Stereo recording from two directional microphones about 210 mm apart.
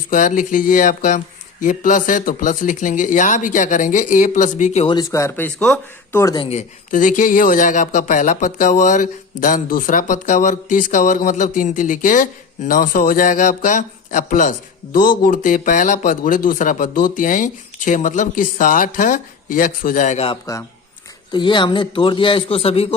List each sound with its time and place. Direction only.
0.1 s speech: 40° left (ahead or behind); by 5.5 s 15° left (ahead or behind)
5.5 s a man's voice: 5° left (ahead or behind); by 23.0 s 25° left (ahead or behind)